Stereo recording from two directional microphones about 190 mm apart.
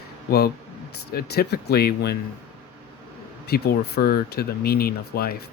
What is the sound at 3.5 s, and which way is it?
Speech, 55° left (ahead or behind).